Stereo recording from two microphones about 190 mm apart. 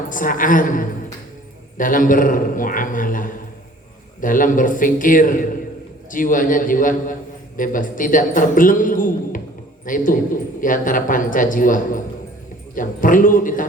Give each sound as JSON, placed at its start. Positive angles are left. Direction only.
{"t": 0.1, "sound": "a man's voice", "side_deg": 45}